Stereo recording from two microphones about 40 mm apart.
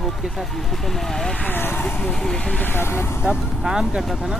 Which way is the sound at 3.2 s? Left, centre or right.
Right.